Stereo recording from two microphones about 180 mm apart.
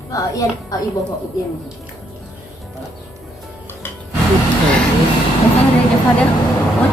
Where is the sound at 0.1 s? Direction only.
20° left (ahead or behind).